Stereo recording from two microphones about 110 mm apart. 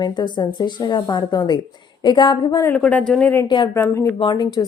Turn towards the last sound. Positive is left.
turn(degrees=40)  # may be behind; listen again after turning